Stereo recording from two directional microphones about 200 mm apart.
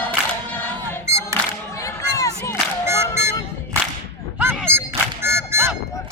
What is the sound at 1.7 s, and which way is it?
Crowd, 15° left (ahead or behind).